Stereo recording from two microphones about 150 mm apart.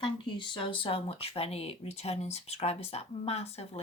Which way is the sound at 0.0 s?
35° left (ahead or behind).